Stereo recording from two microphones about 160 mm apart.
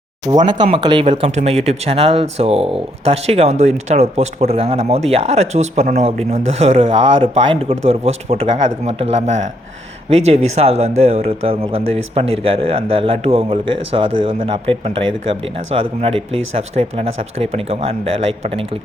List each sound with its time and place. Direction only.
0.3 s speech: 25° right (ahead or behind)